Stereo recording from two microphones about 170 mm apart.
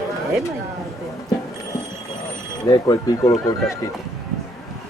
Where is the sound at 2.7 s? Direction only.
20° left (ahead or behind).